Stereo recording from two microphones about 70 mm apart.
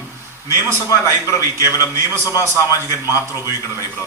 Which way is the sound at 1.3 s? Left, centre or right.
Left.